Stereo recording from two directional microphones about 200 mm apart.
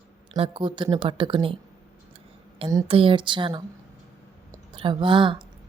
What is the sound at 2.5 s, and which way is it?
A woman's voice, 25° right (ahead or behind).